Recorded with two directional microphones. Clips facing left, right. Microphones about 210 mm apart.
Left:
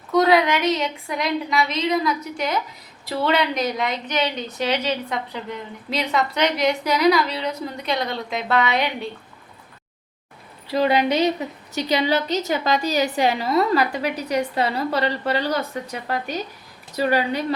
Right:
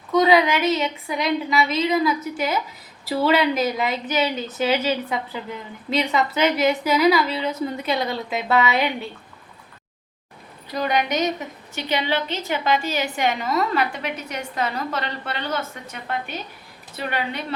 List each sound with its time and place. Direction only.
0.1 s a woman's voice: centre (ahead or behind)
10.7 s a woman's voice: 30° left (ahead or behind)